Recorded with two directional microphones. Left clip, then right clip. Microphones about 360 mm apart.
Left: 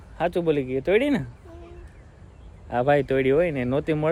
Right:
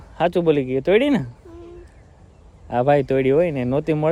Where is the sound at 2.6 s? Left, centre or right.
Right.